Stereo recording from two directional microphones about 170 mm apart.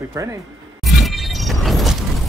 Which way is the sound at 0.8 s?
Centre (ahead or behind).